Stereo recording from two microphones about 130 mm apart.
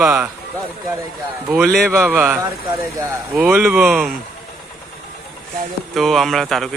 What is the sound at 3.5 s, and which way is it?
Speech, 15° right (ahead or behind).